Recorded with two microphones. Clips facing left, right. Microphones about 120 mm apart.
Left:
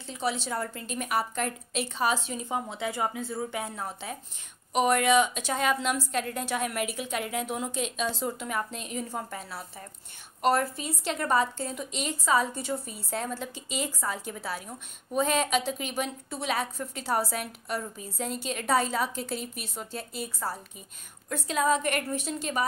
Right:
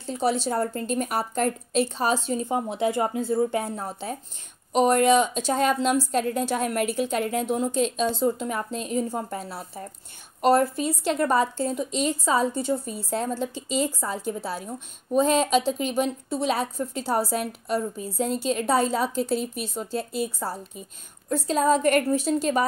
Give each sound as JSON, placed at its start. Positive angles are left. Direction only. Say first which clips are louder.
{"t": 0.0, "sound": "a woman's voice", "louder": "right 7 dB", "side_deg": -40}
{"t": 3.0, "sound": "a woman's voice", "louder": "right 8 dB", "side_deg": -50}